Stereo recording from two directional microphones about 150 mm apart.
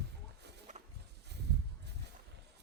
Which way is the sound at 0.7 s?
55° right (ahead or behind).